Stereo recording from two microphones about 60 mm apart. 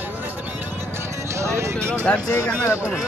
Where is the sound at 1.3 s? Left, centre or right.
Right.